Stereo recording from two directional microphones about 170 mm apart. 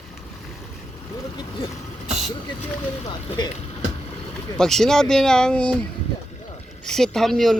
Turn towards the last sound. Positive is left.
turn(degrees=0)  # may be behind; listen again after turning